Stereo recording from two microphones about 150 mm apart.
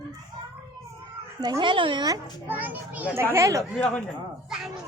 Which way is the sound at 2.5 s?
10° right (ahead or behind).